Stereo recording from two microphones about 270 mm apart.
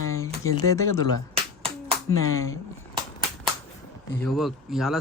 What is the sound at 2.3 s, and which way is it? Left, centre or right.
Speech, centre.